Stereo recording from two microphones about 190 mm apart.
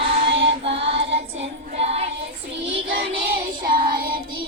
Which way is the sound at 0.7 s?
70° right (ahead or behind).